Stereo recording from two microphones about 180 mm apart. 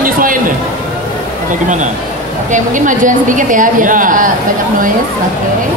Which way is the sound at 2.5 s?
45° right (ahead or behind).